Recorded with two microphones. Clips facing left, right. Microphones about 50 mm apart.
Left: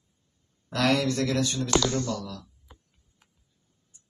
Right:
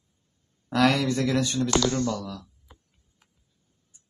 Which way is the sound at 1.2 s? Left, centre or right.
Centre.